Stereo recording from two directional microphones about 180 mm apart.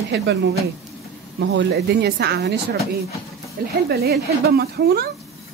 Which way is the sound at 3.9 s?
60° right (ahead or behind).